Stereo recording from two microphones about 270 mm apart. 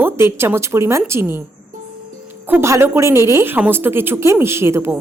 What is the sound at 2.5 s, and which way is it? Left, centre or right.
Speech, centre.